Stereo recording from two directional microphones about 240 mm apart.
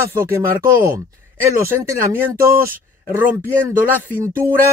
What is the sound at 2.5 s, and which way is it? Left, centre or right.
Speech, right.